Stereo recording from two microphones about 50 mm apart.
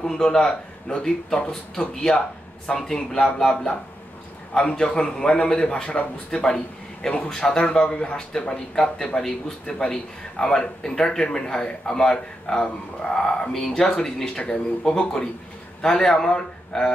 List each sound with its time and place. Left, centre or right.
0.0 s a man's voice: centre